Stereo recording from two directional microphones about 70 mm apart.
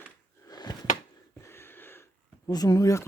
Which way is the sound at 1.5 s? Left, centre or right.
Left.